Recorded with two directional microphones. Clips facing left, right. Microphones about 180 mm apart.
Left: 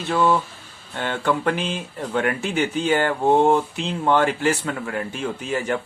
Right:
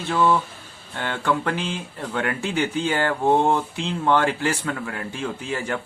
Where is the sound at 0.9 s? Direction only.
20° left (ahead or behind).